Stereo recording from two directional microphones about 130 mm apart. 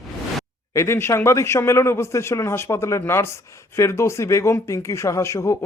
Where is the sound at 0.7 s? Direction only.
20° left (ahead or behind).